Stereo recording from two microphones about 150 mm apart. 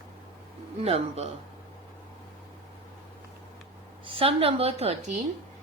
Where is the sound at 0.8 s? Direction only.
45° right (ahead or behind).